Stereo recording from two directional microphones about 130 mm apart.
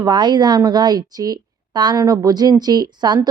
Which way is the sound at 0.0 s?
35° right (ahead or behind).